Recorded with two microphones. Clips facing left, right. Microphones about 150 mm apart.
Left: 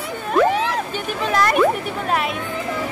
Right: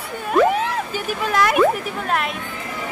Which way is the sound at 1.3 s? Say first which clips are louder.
Even; 5° right (ahead or behind).